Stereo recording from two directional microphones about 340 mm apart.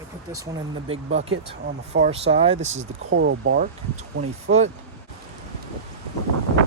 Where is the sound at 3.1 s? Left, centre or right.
Right.